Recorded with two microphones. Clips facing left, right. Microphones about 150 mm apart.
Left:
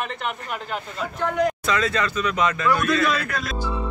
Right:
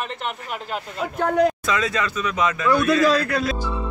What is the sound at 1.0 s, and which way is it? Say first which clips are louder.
Speech: right 4 dB; 50° right (ahead or behind).